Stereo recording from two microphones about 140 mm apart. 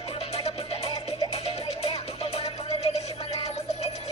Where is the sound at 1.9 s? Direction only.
45° left (ahead or behind).